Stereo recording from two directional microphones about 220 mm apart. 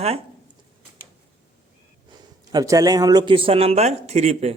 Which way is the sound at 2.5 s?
15° right (ahead or behind).